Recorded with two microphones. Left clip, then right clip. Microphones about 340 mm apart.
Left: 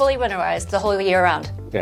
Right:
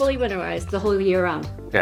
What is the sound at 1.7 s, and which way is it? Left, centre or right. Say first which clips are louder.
Speech: right 4 dB; right.